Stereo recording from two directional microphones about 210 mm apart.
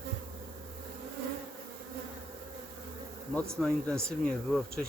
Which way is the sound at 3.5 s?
5° left (ahead or behind).